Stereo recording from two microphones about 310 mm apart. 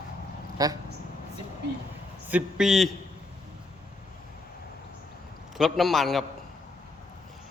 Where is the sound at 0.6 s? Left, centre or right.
Centre.